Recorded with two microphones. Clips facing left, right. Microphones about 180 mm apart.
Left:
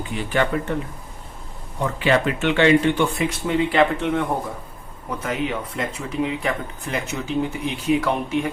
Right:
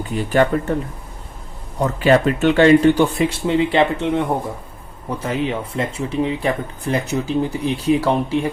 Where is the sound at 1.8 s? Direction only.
40° right (ahead or behind); by 4.2 s 25° right (ahead or behind).